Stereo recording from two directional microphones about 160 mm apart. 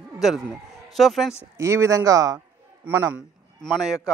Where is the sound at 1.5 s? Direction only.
15° right (ahead or behind).